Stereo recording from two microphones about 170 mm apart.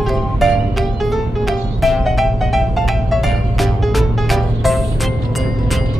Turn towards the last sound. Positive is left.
turn(degrees=0)  # may be behind; listen again after turning